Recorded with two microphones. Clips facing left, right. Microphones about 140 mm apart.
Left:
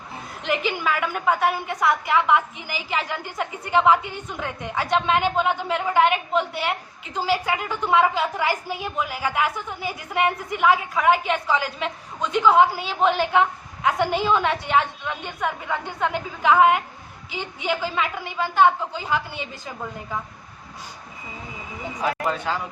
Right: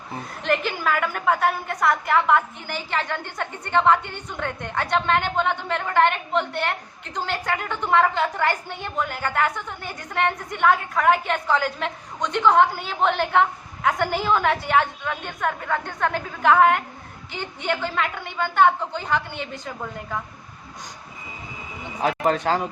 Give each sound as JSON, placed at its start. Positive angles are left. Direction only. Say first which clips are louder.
{"t": 0.4, "sound": "a woman's voice", "louder": "right 1 dB", "side_deg": 0}
{"t": 22.3, "sound": "a man's voice", "louder": "right 4 dB", "side_deg": -50}